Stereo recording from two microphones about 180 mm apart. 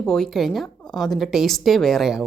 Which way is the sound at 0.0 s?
5° left (ahead or behind).